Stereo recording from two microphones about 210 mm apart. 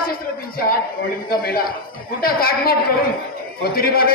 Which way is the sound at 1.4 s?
45° left (ahead or behind).